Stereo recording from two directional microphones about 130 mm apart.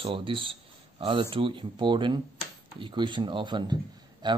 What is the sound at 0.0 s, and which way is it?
Speech, 40° right (ahead or behind).